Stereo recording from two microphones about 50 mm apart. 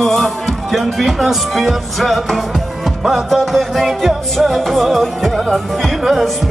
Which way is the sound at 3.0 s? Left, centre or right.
Centre.